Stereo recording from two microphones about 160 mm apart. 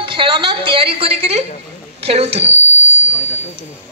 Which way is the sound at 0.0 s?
30° right (ahead or behind).